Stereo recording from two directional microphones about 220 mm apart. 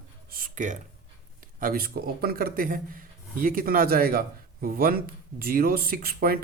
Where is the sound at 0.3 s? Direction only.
40° right (ahead or behind).